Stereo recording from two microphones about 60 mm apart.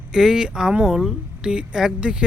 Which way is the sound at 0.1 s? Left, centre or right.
Centre.